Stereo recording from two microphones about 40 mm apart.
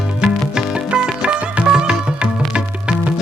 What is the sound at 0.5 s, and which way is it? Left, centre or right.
Music, right.